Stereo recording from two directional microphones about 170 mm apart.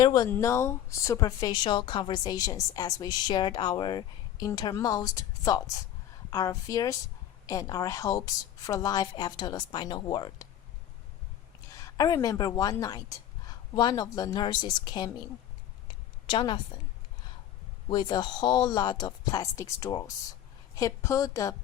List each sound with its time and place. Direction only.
0.0 s speech: 25° left (ahead or behind)
11.7 s a woman's voice: 20° left (ahead or behind)
16.2 s a woman's voice: 25° left (ahead or behind)
17.8 s speech: 25° left (ahead or behind)